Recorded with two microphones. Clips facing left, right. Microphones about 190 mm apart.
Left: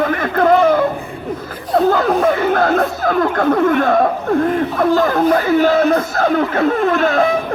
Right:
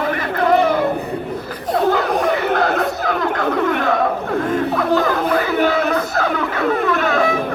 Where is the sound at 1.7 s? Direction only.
50° left (ahead or behind).